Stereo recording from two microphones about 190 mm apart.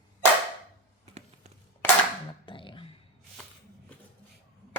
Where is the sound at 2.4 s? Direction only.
25° left (ahead or behind).